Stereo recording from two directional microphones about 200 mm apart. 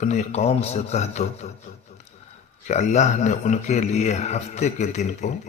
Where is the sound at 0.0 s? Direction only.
35° left (ahead or behind).